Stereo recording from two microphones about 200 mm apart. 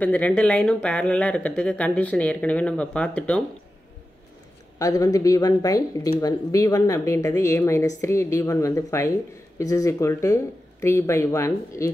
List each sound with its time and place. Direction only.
0.0 s speech: 5° left (ahead or behind)
4.7 s speech: 15° left (ahead or behind)